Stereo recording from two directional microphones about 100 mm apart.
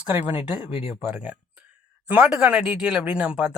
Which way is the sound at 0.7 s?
80° left.